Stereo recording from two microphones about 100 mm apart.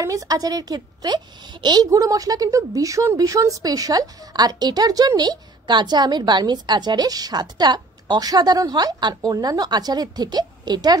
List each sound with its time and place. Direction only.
0.0 s a woman's voice: 35° right (ahead or behind)
1.9 s a woman's voice: 35° right (ahead or behind)